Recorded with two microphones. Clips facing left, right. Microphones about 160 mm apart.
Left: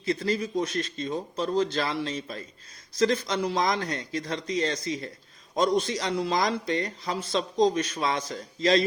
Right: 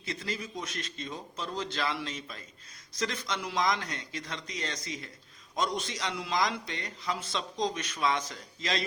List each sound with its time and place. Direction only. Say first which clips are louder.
0.0 s a man's voice: left 10 dB; 35° left (ahead or behind)